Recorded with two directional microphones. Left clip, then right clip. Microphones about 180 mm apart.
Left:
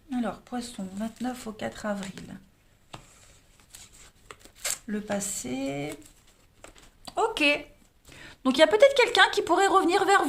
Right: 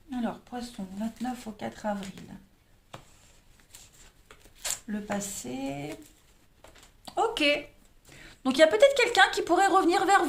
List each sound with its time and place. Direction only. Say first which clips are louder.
0.1 s speech: left 2 dB; 55° left (ahead or behind)
4.5 s speech: left 2 dB; 45° left (ahead or behind)
7.0 s a sound: left 1 dB; 30° left (ahead or behind)
8.1 s speech: left 2 dB; 30° left (ahead or behind)